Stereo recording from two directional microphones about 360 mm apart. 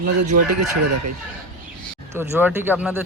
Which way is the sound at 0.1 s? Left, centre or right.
Right.